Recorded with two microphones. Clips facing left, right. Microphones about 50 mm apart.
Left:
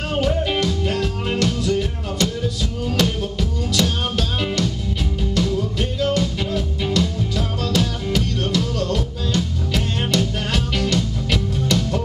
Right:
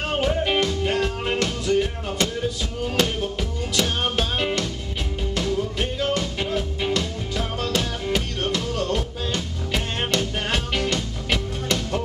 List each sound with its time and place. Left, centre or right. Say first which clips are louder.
0.4 s music: left 1 dB; centre